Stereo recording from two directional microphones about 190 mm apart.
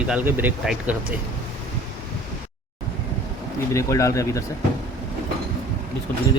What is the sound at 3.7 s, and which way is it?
Speech, 15° left (ahead or behind).